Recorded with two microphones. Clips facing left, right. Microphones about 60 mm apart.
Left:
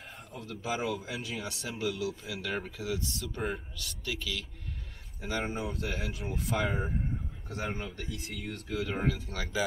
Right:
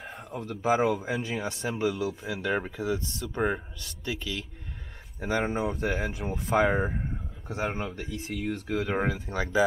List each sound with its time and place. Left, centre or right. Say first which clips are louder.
0.4 s speech: right 9 dB; right
7.4 s speech: right 6 dB; right
8.6 s speech: right 3 dB; right